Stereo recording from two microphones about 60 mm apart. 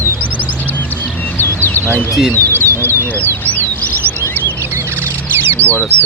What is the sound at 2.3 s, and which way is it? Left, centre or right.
Speech, left.